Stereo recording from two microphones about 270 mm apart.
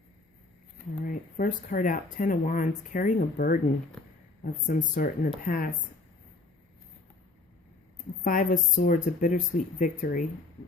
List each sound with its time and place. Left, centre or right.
1.0 s speech: left
4.6 s speech: left
7.9 s a sound: left
8.7 s speech: left